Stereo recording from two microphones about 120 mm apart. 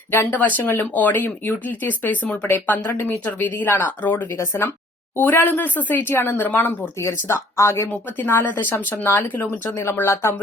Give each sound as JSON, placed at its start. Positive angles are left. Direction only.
{"t": 0.1, "sound": "speech", "side_deg": 15}
{"t": 7.0, "sound": "speech", "side_deg": 25}